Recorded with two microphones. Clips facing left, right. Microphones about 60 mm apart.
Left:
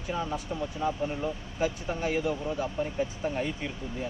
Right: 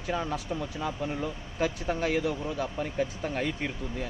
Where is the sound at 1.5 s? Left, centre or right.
Right.